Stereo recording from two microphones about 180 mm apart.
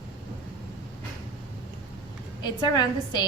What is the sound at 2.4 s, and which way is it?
Speech, 25° left (ahead or behind).